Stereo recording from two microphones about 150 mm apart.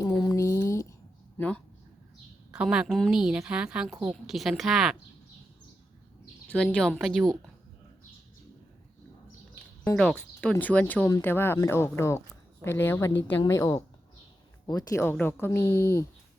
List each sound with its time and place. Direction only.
0.0 s a sound: 25° left (ahead or behind)
1.4 s speech: 10° left (ahead or behind)
2.6 s a woman's voice: 5° right (ahead or behind)
6.8 s a woman's voice: centre (ahead or behind)
9.9 s a woman's voice: 5° left (ahead or behind)